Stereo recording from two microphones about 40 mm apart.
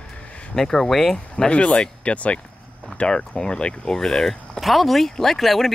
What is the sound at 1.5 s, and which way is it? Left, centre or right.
Speech, left.